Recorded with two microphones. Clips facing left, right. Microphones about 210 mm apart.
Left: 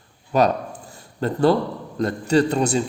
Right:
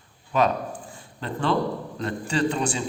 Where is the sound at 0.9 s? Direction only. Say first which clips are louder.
Left 8 dB; 40° left (ahead or behind).